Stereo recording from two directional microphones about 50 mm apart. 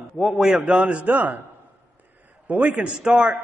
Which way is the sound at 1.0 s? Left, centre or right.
Right.